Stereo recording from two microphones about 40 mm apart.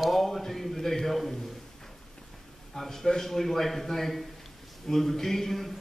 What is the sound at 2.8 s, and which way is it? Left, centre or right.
A man's voice, centre.